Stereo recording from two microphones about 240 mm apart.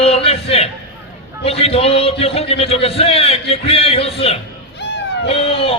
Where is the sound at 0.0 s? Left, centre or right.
Left.